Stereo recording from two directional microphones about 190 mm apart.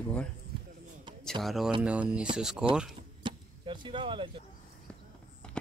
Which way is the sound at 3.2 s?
25° right (ahead or behind).